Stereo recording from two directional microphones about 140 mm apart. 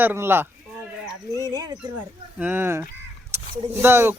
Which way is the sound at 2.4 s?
15° right (ahead or behind).